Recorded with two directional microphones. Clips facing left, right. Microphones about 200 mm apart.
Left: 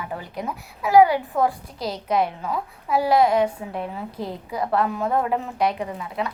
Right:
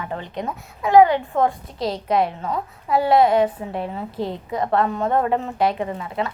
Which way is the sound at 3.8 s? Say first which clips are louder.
Right 2 dB; 30° right (ahead or behind).